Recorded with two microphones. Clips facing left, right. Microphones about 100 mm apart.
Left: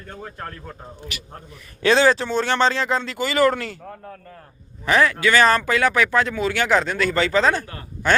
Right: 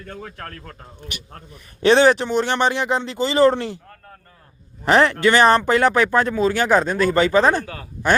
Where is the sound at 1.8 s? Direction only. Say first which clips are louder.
Right 3 dB; 25° right (ahead or behind).